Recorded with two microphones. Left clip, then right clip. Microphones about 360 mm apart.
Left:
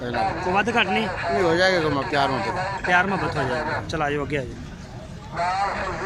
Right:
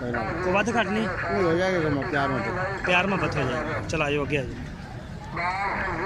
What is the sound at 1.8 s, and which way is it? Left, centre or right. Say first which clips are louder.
Speech: left 4 dB; left.